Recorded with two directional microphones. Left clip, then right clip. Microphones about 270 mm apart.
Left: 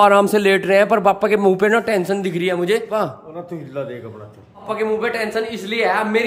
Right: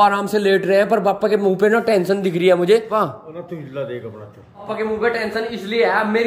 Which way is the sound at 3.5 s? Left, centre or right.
Centre.